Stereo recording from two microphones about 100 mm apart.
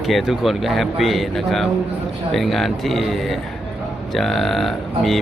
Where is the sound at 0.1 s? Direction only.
Centre (ahead or behind).